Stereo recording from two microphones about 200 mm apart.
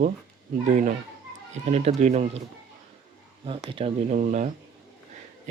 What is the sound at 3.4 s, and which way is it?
Speech, 25° right (ahead or behind).